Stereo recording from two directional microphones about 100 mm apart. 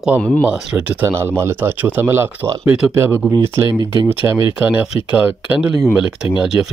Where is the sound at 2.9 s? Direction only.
25° right (ahead or behind).